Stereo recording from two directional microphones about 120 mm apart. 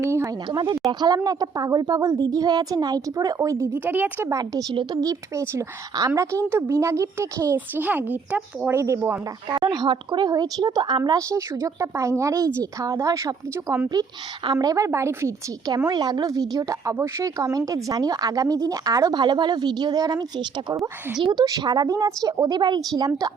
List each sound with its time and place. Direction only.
0.0 s a woman's voice: 25° right (ahead or behind)
0.4 s a woman's voice: 40° right (ahead or behind); by 4.3 s 15° right (ahead or behind)
4.3 s a woman's voice: 30° right (ahead or behind)
9.5 s a woman's voice: 40° right (ahead or behind)
11.3 s a woman's voice: 25° right (ahead or behind)
15.9 s a woman's voice: 35° right (ahead or behind)